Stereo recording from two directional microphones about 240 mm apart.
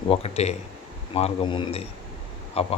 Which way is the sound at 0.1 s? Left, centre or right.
Left.